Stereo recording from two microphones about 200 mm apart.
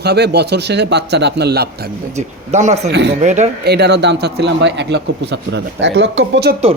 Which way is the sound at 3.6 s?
55° right (ahead or behind).